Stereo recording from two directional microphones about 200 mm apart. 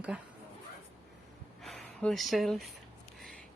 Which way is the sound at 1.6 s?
Centre (ahead or behind).